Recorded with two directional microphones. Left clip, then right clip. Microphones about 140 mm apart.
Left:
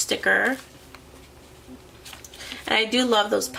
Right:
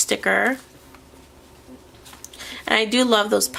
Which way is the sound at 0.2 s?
40° right (ahead or behind).